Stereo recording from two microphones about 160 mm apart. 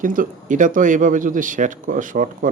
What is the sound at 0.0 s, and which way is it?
Speech, 60° right (ahead or behind).